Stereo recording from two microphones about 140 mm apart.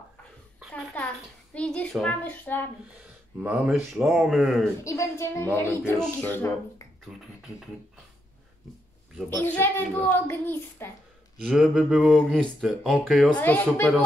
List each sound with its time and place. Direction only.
1.2 s a child's voice: 5° left (ahead or behind)
3.4 s speech: 5° right (ahead or behind)
4.8 s a woman's voice: 20° left (ahead or behind)
9.3 s a child's voice: 15° left (ahead or behind)
11.4 s speech: 5° right (ahead or behind)
13.4 s a child's voice: 15° left (ahead or behind)